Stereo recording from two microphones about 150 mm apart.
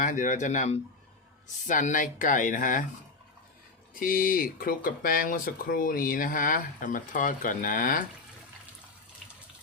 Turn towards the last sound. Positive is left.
turn(degrees=65)  # may be behind; listen again after turning